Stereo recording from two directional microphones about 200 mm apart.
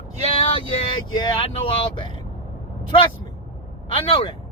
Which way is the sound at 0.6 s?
25° left (ahead or behind).